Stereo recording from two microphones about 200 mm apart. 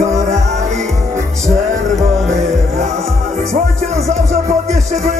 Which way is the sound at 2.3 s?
35° right (ahead or behind).